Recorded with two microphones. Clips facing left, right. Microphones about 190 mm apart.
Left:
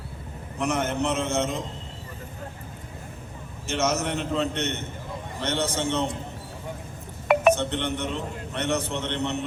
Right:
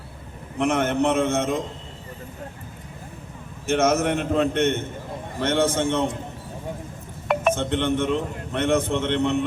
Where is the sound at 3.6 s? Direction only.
55° right (ahead or behind).